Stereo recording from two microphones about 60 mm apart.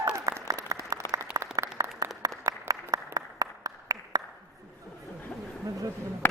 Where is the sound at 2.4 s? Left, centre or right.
Right.